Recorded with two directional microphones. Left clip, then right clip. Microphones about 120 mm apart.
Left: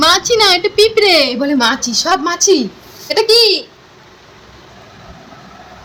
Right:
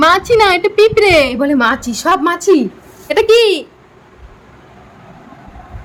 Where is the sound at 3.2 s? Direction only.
35° right (ahead or behind).